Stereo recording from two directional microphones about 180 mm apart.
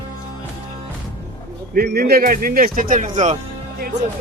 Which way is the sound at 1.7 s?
55° right (ahead or behind).